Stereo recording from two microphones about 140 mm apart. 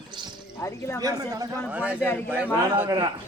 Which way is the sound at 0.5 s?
20° left (ahead or behind).